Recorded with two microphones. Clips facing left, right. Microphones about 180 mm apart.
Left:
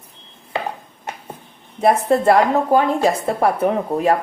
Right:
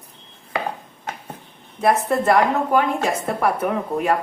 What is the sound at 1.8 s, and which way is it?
A woman's voice, 30° left (ahead or behind).